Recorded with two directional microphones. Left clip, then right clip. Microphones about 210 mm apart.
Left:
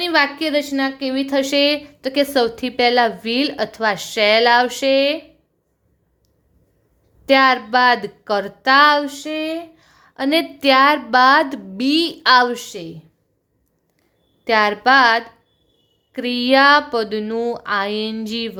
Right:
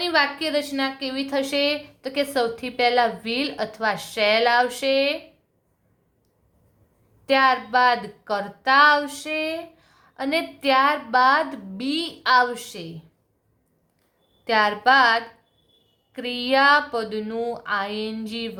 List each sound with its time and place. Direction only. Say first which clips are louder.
0.0 s speech: left 4 dB; 35° left (ahead or behind)
7.3 s speech: left 5 dB; 35° left (ahead or behind)
14.4 s speech: left 4 dB; 35° left (ahead or behind)